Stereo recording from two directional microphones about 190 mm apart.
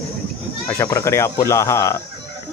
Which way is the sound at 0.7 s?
15° left (ahead or behind).